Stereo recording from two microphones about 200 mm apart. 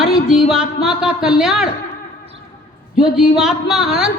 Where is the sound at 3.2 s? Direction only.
5° right (ahead or behind).